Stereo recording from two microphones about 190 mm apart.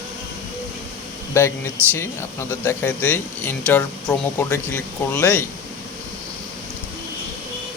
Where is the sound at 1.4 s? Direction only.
15° left (ahead or behind).